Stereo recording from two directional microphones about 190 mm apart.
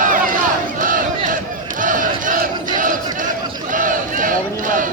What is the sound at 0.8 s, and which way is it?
Crowd, 45° right (ahead or behind).